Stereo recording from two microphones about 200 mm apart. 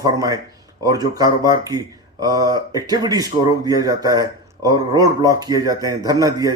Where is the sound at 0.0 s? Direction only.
20° right (ahead or behind).